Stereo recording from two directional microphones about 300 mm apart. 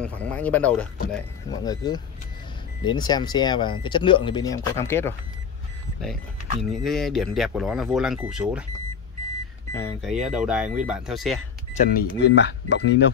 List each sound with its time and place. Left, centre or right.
0.0 s speech: centre
6.6 s speech: centre
9.8 s speech: centre
11.7 s speech: left